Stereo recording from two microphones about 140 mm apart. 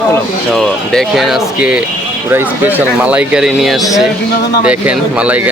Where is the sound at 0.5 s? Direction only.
5° left (ahead or behind).